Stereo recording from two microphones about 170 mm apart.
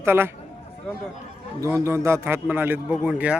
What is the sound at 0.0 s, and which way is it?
Speech, 15° right (ahead or behind).